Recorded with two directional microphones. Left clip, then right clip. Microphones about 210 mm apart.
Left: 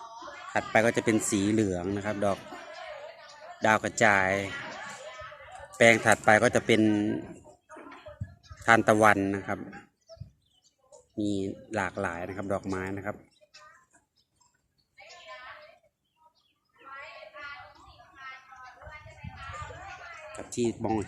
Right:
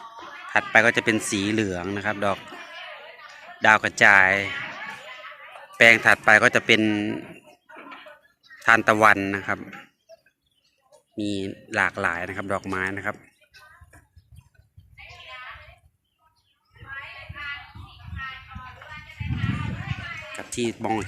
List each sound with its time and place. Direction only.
0.7 s speech: 5° left (ahead or behind)
3.6 s speech: 5° left (ahead or behind)
5.7 s a man's voice: 10° left (ahead or behind)
7.7 s a sound: 45° left (ahead or behind)
8.6 s a man's voice: 10° left (ahead or behind)
11.2 s speech: centre (ahead or behind)
16.9 s a sound: 50° left (ahead or behind)
20.3 s speech: 5° right (ahead or behind)